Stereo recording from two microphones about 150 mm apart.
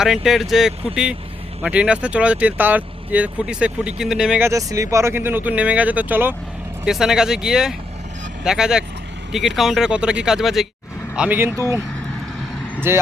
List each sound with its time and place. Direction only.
0.0 s speech: 5° right (ahead or behind)
4.4 s speech: 20° right (ahead or behind)
12.9 s speech: 15° right (ahead or behind)